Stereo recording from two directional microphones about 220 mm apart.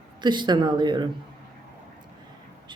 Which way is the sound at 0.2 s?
20° right (ahead or behind).